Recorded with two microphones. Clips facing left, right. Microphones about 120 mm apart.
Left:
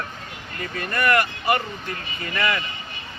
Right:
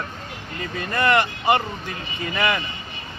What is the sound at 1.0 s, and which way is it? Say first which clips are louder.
Speech: right 1 dB; 25° right (ahead or behind).